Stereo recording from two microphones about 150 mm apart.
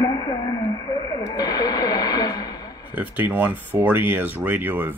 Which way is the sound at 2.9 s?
10° right (ahead or behind).